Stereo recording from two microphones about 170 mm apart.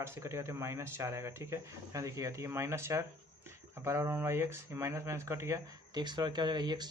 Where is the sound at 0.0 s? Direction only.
15° right (ahead or behind).